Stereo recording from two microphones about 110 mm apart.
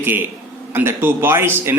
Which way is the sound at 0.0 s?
15° right (ahead or behind).